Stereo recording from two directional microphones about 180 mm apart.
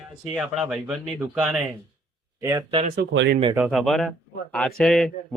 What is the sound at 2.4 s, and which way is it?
Speech, 20° right (ahead or behind).